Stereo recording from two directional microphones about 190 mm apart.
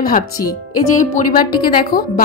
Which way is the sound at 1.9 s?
20° left (ahead or behind).